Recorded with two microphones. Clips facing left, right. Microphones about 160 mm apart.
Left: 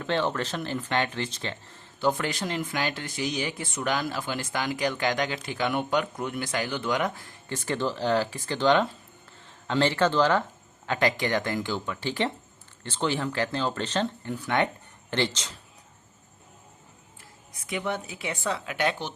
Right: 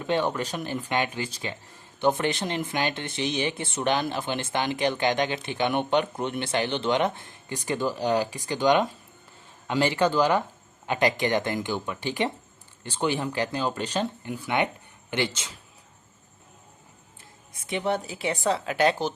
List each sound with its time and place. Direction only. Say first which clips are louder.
0.0 s speech: right 1 dB; 15° right (ahead or behind)
2.0 s speech: right 2 dB; 20° right (ahead or behind)
17.5 s speech: right 4 dB; 25° right (ahead or behind)